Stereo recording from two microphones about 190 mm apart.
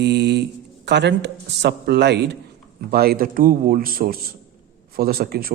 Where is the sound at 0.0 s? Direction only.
60° right (ahead or behind).